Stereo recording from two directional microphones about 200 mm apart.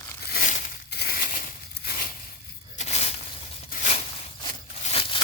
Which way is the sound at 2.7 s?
35° left (ahead or behind).